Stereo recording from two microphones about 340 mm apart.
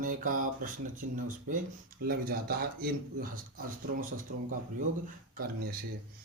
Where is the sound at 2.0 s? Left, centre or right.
Right.